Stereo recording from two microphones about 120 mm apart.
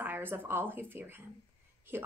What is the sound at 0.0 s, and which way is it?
Speech, 15° right (ahead or behind).